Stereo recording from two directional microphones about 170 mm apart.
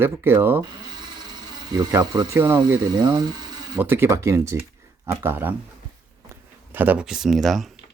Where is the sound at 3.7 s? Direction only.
10° right (ahead or behind).